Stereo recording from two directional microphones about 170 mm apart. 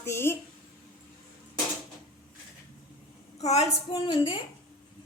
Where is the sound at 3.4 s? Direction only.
40° left (ahead or behind).